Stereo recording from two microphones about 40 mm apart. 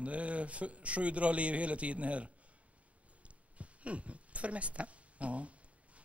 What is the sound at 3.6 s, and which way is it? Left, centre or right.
Speech, right.